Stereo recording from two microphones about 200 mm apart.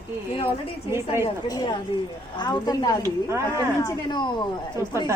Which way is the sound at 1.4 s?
20° left (ahead or behind).